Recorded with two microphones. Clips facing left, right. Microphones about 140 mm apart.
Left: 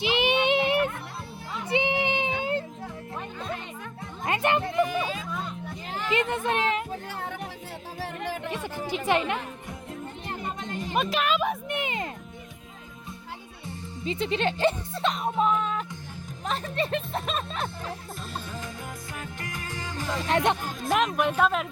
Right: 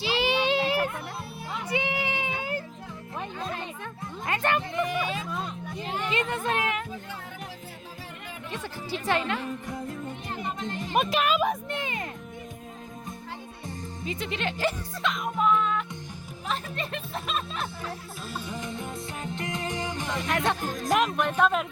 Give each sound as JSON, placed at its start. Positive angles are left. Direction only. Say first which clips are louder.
{"t": 0.0, "sound": "child singing", "louder": "left 2 dB", "side_deg": 20}
{"t": 4.3, "sound": "a sound", "louder": "left 2 dB", "side_deg": 20}
{"t": 6.1, "sound": "speech", "louder": "left 3 dB", "side_deg": 20}
{"t": 8.0, "sound": "music", "louder": "left 13 dB", "side_deg": 70}
{"t": 8.4, "sound": "a sound", "louder": "left 4 dB", "side_deg": 15}
{"t": 8.9, "sound": "speech", "louder": "left 2 dB", "side_deg": 20}
{"t": 10.9, "sound": "a woman's voice", "louder": "right 1 dB", "side_deg": -5}
{"t": 11.7, "sound": "music", "louder": "left 2 dB", "side_deg": 20}
{"t": 14.0, "sound": "music", "louder": "left 5 dB", "side_deg": 30}
{"t": 16.5, "sound": "speech", "louder": "left 4 dB", "side_deg": 35}
{"t": 18.4, "sound": "music", "louder": "right 3 dB", "side_deg": -20}
{"t": 20.1, "sound": "speech", "louder": "left 4 dB", "side_deg": 30}
{"t": 20.8, "sound": "speech", "louder": "even", "side_deg": -10}
{"t": 21.2, "sound": "a woman's voice", "louder": "even", "side_deg": 10}